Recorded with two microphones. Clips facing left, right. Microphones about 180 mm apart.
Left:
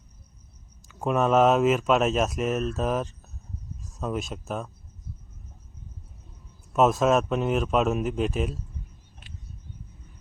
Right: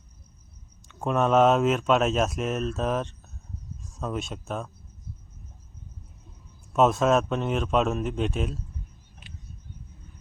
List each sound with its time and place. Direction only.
0.9 s speech: 5° left (ahead or behind)
6.7 s speech: centre (ahead or behind)